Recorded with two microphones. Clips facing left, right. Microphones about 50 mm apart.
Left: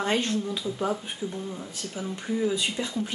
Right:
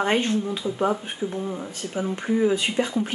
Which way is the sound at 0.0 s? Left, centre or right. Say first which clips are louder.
Right 4 dB; right.